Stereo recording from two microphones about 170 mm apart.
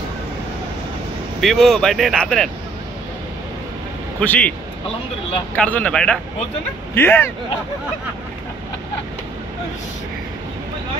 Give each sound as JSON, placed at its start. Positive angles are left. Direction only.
{"t": 1.4, "sound": "speech", "side_deg": 0}
{"t": 4.2, "sound": "speech", "side_deg": 10}
{"t": 5.6, "sound": "speech", "side_deg": 5}